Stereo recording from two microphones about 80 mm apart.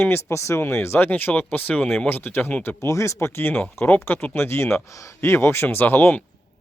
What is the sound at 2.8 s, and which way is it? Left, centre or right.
Speech, left.